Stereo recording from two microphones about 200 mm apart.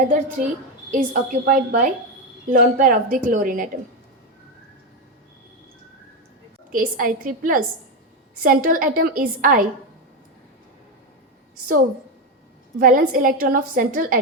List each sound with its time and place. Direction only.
0.4 s a woman's voice: 35° right (ahead or behind)
6.7 s a woman's voice: 45° right (ahead or behind)
12.8 s a woman's voice: 45° right (ahead or behind)